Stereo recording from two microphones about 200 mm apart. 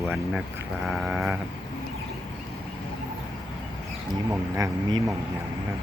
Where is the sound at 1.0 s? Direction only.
5° right (ahead or behind).